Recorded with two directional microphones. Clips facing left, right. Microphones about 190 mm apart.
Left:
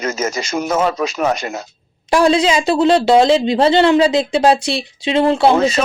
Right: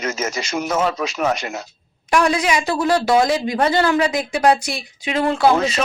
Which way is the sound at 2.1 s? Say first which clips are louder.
Left 5 dB; 30° left (ahead or behind).